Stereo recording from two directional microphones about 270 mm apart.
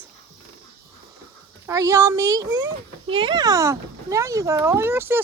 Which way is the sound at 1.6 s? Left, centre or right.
Centre.